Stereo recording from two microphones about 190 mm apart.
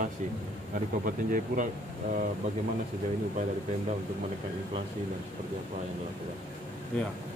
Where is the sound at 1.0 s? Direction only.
45° right (ahead or behind).